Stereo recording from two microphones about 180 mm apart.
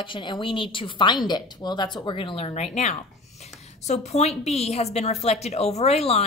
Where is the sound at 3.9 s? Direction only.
40° left (ahead or behind).